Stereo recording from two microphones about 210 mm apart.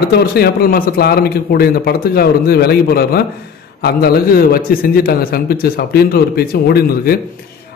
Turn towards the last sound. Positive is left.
turn(degrees=45)  # may be behind; listen again after turning